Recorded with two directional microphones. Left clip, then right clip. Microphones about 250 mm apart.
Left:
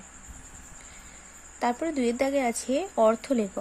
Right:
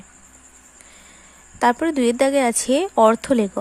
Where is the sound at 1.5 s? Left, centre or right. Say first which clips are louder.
Right 9 dB; centre.